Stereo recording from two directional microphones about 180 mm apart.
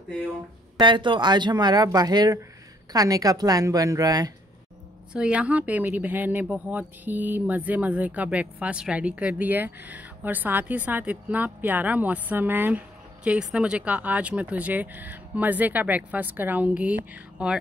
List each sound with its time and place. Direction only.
0.7 s speech: 25° right (ahead or behind)
5.1 s speech: 5° right (ahead or behind)